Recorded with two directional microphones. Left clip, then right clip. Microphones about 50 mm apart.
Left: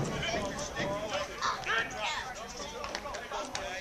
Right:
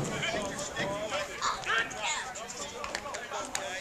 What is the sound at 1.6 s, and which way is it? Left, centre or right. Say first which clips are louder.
Bow-wow: right 3 dB; centre.